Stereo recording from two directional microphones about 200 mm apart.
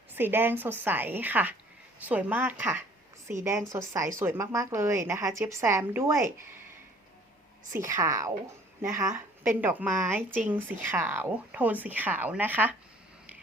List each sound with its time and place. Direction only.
0.2 s a woman's voice: 10° right (ahead or behind)
7.7 s a woman's voice: 15° right (ahead or behind)